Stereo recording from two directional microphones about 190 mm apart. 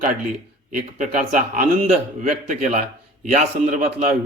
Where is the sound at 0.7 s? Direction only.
40° right (ahead or behind).